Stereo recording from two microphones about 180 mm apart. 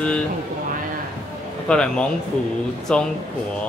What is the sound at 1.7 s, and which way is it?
Speech, 5° left (ahead or behind).